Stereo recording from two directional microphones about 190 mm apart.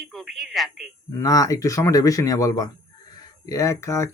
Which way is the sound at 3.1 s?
15° left (ahead or behind).